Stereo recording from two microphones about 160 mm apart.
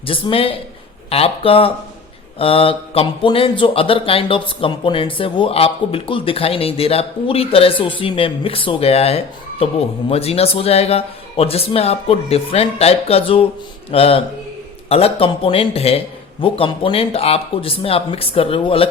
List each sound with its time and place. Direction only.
0.0 s speech: 35° left (ahead or behind)